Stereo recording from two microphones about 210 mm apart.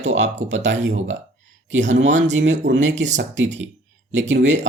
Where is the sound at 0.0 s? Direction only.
60° right (ahead or behind).